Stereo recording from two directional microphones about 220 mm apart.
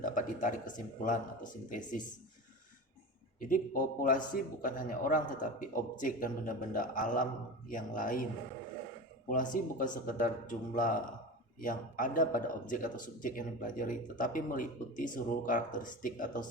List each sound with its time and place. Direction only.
0.0 s speech: 35° left (ahead or behind)
3.4 s speech: 40° left (ahead or behind)
9.3 s speech: 35° left (ahead or behind)